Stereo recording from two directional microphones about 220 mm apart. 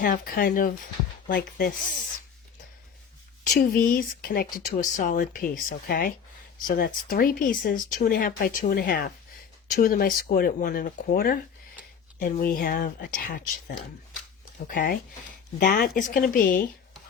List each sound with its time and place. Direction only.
0.0 s speech: 40° left (ahead or behind)
3.5 s speech: 40° left (ahead or behind)